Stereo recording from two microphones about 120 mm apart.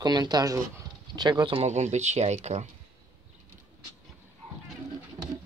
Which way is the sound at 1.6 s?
70° right (ahead or behind).